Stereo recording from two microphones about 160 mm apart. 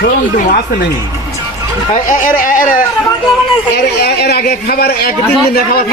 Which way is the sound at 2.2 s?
55° left (ahead or behind).